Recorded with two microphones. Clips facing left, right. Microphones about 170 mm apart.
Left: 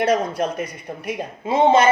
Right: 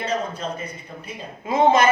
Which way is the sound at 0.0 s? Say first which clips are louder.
Left 7 dB; 80° left.